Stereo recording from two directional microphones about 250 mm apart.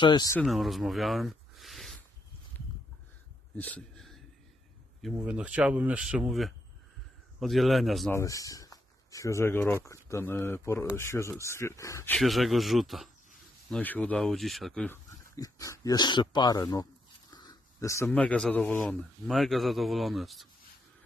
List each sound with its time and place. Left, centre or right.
0.0 s speech: centre
0.4 s speech: centre
3.5 s a sound: centre
5.0 s speech: centre
8.2 s speech: centre